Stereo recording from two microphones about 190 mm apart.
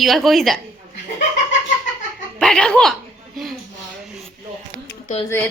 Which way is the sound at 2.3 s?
5° left (ahead or behind).